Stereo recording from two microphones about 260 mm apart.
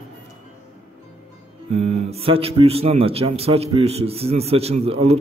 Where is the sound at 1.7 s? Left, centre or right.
Right.